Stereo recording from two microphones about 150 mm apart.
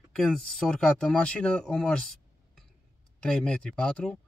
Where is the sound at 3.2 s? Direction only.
5° left (ahead or behind).